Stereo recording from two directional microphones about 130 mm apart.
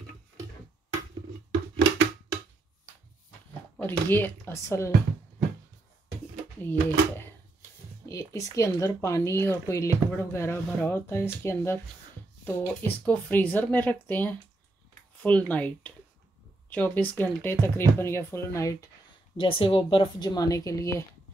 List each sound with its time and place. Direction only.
3.8 s speech: 15° left (ahead or behind)
6.6 s speech: 15° left (ahead or behind)
19.3 s speech: 45° left (ahead or behind)
20.2 s speech: 25° left (ahead or behind)